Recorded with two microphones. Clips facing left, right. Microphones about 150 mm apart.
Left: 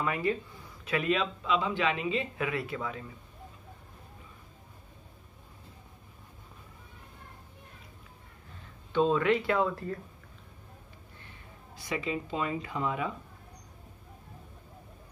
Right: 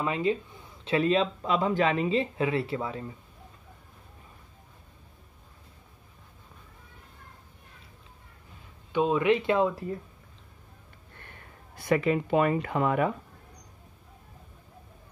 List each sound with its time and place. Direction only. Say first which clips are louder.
0.0 s speech: right 3 dB; 20° right (ahead or behind)
8.9 s speech: right 2 dB; 15° right (ahead or behind)
11.1 s speech: right 3 dB; 55° right (ahead or behind)